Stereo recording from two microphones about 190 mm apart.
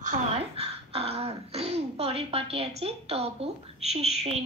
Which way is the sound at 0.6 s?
30° right (ahead or behind).